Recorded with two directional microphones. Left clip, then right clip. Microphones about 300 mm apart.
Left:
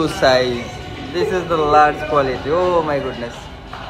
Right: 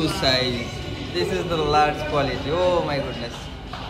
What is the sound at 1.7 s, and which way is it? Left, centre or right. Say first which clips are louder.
Speech: left 7 dB; centre.